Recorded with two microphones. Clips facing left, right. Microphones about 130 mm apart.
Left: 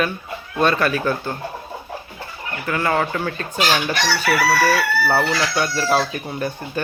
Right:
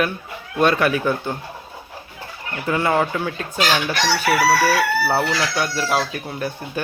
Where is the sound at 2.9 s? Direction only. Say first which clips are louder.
Right 1 dB; 5° right (ahead or behind).